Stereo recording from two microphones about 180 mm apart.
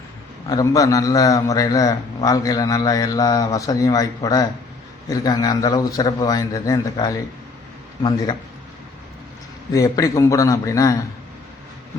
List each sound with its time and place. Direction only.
0.4 s a man's voice: 20° left (ahead or behind)
9.7 s a man's voice: 20° left (ahead or behind)